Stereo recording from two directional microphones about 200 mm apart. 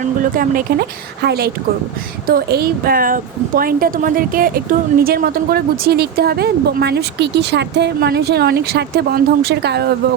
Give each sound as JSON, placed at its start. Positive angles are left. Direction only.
{"t": 0.0, "sound": "a woman's voice", "side_deg": -45}